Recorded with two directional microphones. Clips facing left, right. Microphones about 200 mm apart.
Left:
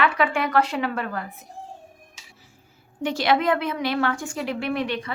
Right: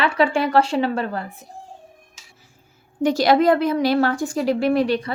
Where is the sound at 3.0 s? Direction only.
40° right (ahead or behind).